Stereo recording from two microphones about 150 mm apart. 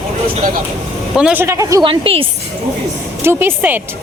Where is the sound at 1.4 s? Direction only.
20° right (ahead or behind).